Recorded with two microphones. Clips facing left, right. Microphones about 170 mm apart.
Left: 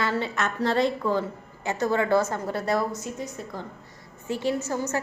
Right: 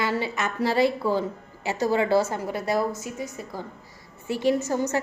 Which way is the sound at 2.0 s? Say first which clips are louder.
Even; 30° right (ahead or behind).